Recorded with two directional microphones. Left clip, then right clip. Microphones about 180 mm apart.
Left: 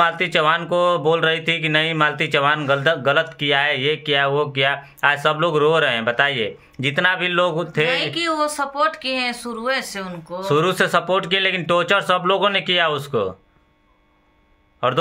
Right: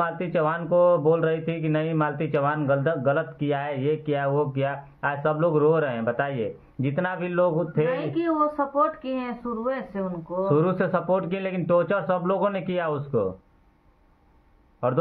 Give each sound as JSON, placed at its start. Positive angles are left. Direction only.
{"t": 0.0, "sound": "speech", "side_deg": 15}
{"t": 8.1, "sound": "speech", "side_deg": 0}
{"t": 10.5, "sound": "speech", "side_deg": 15}